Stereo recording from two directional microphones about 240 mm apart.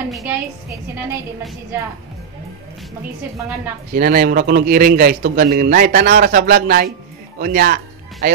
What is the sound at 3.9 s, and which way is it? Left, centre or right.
A man's voice, right.